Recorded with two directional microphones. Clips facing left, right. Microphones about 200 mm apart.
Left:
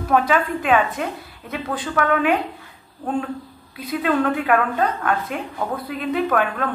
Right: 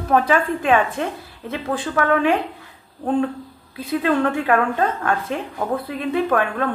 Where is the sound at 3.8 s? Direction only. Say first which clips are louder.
Right 1 dB; 30° right (ahead or behind).